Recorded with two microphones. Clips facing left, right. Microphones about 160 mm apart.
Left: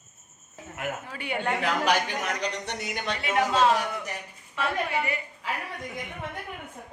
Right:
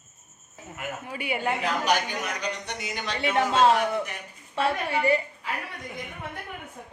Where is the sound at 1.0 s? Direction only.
10° right (ahead or behind).